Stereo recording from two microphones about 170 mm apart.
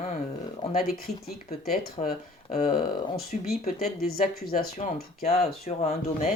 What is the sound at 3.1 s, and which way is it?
Speech, 60° left (ahead or behind).